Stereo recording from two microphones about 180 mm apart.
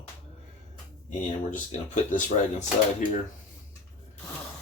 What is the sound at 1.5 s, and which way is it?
Speech, 45° left (ahead or behind).